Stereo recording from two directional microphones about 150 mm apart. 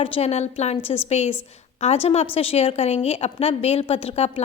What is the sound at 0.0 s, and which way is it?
A woman's voice, 40° left (ahead or behind).